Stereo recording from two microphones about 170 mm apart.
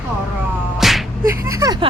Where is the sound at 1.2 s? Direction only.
20° right (ahead or behind).